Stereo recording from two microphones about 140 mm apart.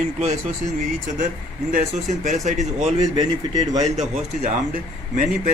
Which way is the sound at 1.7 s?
60° right (ahead or behind).